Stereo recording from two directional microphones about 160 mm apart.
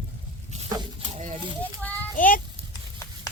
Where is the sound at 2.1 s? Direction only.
60° left (ahead or behind).